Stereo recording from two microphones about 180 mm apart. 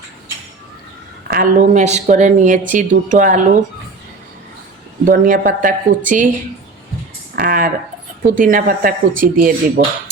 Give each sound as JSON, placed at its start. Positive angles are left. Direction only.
{"t": 1.3, "sound": "a woman's voice", "side_deg": -45}
{"t": 5.0, "sound": "a woman's voice", "side_deg": -50}
{"t": 7.3, "sound": "a woman's voice", "side_deg": -50}